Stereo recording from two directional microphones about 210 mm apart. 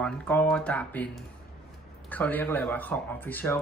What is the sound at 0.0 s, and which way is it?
Speech, 10° left (ahead or behind).